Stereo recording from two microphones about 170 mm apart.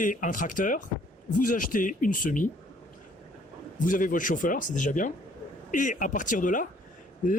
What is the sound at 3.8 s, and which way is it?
Speech, 50° left (ahead or behind).